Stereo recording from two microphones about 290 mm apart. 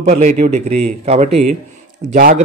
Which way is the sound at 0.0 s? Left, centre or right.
Right.